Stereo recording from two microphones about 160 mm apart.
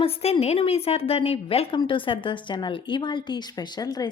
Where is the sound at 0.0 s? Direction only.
35° left (ahead or behind).